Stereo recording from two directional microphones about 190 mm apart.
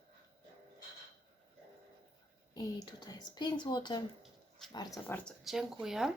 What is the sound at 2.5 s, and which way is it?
Speech, 20° left (ahead or behind).